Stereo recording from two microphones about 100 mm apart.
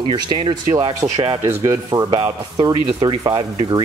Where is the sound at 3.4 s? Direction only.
50° right (ahead or behind).